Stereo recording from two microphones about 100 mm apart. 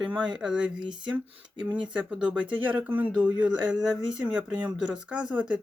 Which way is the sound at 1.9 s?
10° right (ahead or behind).